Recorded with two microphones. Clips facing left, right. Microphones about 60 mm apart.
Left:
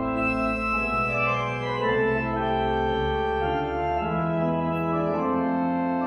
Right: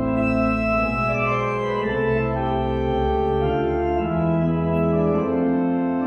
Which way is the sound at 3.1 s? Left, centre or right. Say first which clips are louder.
Right 4 dB; centre.